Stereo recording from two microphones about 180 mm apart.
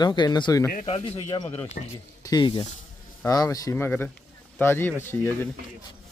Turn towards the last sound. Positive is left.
turn(degrees=10)  # may be behind; listen again after turning